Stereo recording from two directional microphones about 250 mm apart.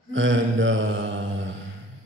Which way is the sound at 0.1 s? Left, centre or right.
Right.